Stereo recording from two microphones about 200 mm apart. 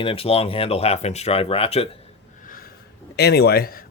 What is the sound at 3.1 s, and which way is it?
Speech, 55° left (ahead or behind).